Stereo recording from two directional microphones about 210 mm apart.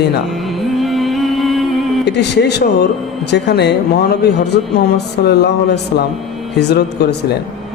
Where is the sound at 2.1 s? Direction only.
55° left (ahead or behind).